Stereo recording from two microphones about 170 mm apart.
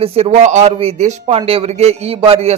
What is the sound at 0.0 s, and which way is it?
Speech, 35° right (ahead or behind).